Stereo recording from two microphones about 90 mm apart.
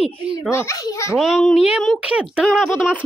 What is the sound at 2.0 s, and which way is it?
Speech, 15° right (ahead or behind).